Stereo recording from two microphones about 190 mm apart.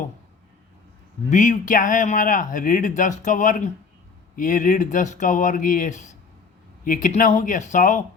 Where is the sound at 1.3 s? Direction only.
40° left (ahead or behind).